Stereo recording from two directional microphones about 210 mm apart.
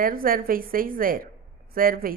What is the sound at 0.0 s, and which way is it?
A woman's voice, 40° right (ahead or behind).